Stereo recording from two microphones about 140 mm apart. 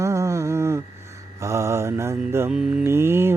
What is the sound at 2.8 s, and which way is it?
Mantra, 15° right (ahead or behind).